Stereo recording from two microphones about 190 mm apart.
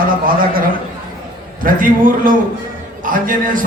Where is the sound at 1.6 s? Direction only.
45° right (ahead or behind).